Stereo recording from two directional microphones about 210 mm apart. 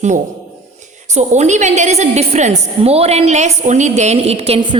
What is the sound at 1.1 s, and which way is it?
A woman's voice, 35° right (ahead or behind).